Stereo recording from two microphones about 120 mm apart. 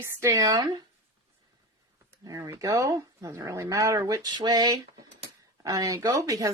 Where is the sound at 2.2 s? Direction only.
30° right (ahead or behind).